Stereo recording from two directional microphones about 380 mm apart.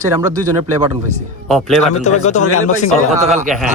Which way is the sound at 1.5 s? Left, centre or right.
Centre.